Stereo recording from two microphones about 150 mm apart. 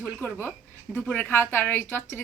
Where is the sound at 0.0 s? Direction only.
10° left (ahead or behind).